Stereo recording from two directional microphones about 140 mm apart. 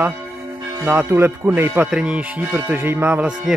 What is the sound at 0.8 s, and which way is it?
Speech, 15° right (ahead or behind).